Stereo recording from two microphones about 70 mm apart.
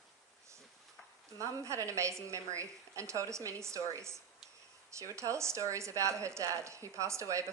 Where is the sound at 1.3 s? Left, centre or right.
Right.